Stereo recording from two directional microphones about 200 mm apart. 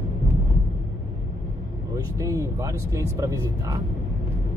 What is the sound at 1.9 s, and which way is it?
Speech, 15° right (ahead or behind).